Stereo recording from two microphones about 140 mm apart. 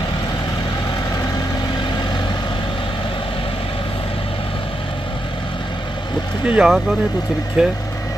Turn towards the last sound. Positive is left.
turn(degrees=-5)  # may be behind; listen again after turning